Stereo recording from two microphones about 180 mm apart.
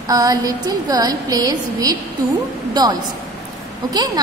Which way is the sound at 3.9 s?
20° right (ahead or behind).